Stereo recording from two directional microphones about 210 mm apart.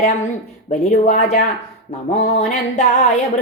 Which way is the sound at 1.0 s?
35° left (ahead or behind).